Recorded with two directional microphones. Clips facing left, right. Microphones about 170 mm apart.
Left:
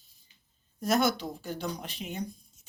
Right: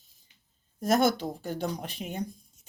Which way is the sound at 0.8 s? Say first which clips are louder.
Right 2 dB; 50° right (ahead or behind).